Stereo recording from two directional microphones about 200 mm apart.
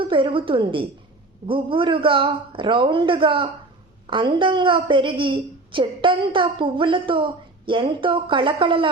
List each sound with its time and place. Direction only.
0.0 s a woman's voice: 25° right (ahead or behind)